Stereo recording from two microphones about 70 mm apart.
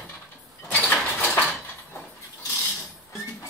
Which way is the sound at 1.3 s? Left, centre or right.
Left.